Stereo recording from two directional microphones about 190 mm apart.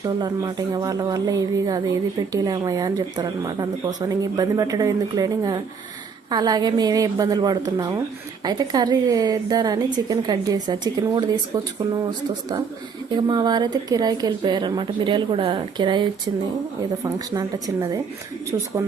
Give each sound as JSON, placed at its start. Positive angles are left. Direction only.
{"t": 0.0, "sound": "speech", "side_deg": -20}